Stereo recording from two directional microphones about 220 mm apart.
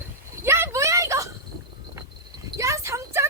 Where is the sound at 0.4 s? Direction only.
10° right (ahead or behind).